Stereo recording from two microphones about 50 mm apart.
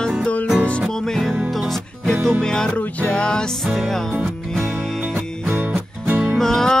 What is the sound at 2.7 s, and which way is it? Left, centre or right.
Music, left.